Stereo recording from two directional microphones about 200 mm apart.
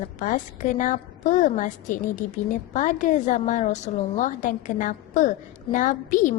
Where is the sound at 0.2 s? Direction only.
40° left (ahead or behind).